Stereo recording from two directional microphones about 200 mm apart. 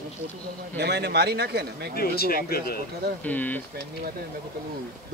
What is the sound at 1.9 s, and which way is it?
Speech, 50° left (ahead or behind).